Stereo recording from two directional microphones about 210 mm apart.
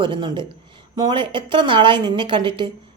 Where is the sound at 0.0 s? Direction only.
25° right (ahead or behind).